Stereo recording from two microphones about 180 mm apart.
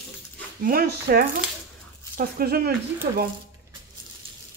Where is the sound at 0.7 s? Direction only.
60° right (ahead or behind).